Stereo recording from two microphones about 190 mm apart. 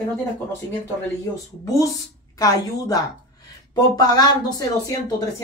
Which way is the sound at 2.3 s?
20° left (ahead or behind).